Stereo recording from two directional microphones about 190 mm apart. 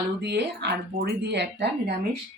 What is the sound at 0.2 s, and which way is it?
Speech, 60° right (ahead or behind).